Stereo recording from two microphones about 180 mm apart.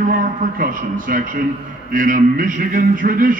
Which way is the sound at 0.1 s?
50° right (ahead or behind).